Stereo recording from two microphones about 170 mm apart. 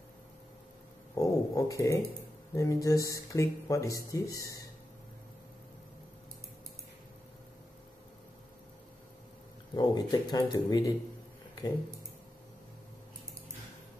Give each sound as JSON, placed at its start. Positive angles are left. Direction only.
{"t": 1.1, "sound": "a sound", "side_deg": 20}
{"t": 2.5, "sound": "speech", "side_deg": 20}
{"t": 9.8, "sound": "speech", "side_deg": 25}